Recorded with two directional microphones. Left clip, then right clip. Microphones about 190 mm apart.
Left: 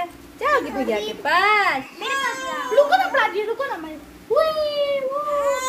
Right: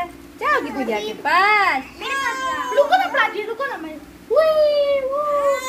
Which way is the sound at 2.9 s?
50° left (ahead or behind).